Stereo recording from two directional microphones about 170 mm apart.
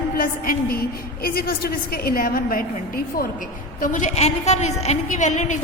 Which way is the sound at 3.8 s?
50° left (ahead or behind).